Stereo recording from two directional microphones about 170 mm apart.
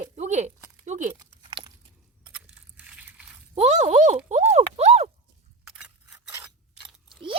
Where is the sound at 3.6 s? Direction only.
40° right (ahead or behind).